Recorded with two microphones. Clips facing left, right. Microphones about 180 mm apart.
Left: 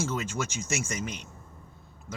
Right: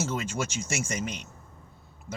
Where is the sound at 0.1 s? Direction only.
10° right (ahead or behind).